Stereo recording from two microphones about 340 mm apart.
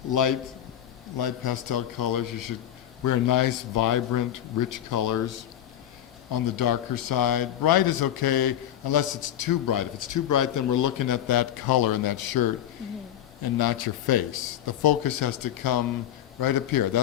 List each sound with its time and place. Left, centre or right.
0.1 s speech: left
1.2 s a man's voice: left
6.3 s a man's voice: left
16.4 s speech: left